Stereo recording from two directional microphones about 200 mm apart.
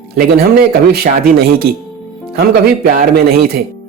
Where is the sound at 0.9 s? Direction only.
50° right (ahead or behind).